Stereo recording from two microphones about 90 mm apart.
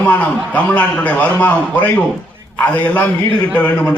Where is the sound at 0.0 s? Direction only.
20° left (ahead or behind).